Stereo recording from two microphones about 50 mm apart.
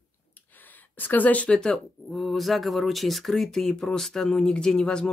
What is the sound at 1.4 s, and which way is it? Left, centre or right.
Speech, centre.